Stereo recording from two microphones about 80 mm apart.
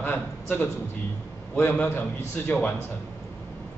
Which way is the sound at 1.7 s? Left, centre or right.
Left.